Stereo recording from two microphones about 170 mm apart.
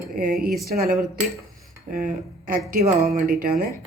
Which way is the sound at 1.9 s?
55° right (ahead or behind).